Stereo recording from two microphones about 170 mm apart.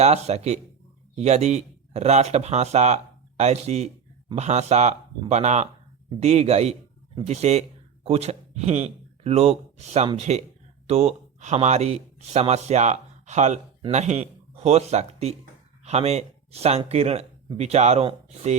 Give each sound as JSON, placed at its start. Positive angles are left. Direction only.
{"t": 0.0, "sound": "a man's voice", "side_deg": -40}